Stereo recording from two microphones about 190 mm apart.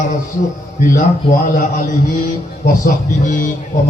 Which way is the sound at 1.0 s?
45° left (ahead or behind).